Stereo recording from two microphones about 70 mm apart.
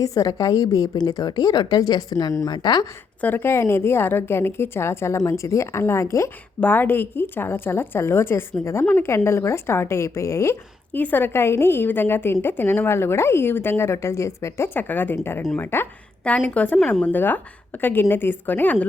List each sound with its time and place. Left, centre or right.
0.0 s a woman's voice: left
3.2 s a woman's voice: left
6.6 s a woman's voice: left
10.9 s a woman's voice: left
14.7 s a woman's voice: left
16.2 s a woman's voice: left